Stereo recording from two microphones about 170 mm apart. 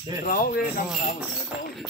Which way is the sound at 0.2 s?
55° left (ahead or behind).